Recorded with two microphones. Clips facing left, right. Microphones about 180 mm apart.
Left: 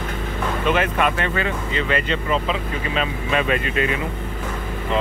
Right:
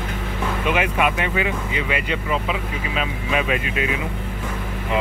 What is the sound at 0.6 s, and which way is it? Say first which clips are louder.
Speech: left 1 dB; 10° right (ahead or behind).